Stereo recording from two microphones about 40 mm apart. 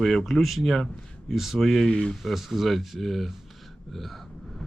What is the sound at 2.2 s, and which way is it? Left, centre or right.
Speech, centre.